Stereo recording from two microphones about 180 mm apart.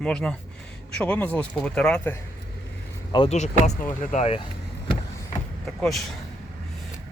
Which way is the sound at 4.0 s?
45° left (ahead or behind).